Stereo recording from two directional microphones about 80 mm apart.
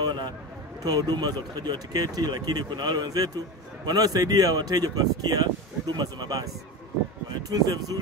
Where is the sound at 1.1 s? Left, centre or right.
Right.